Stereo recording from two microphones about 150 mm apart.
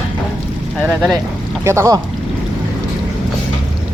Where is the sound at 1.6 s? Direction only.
20° right (ahead or behind).